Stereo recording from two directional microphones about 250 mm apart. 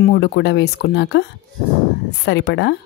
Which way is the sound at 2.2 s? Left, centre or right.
Left.